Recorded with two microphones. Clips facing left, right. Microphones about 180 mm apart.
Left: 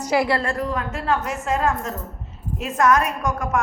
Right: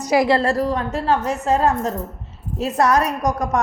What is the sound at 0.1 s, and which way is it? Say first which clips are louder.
Speech: right 4 dB; 15° right (ahead or behind).